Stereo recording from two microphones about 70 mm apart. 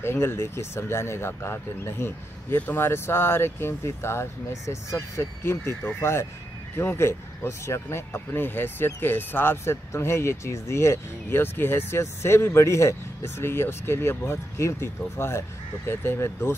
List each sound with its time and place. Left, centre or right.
0.0 s speech: left